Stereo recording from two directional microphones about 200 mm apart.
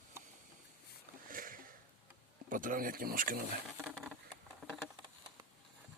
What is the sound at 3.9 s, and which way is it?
Patter, centre (ahead or behind).